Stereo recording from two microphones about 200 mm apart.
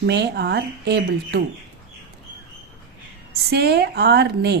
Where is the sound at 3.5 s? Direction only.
55° right (ahead or behind).